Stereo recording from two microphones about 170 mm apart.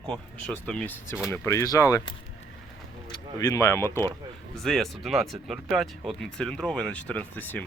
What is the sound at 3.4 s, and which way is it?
Speech, 15° left (ahead or behind).